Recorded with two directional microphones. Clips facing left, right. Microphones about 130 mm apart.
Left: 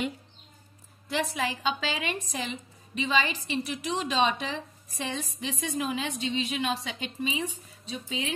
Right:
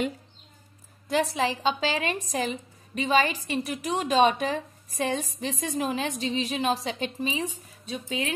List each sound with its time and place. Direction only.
1.3 s a woman's voice: 30° right (ahead or behind); by 8.3 s 45° right (ahead or behind)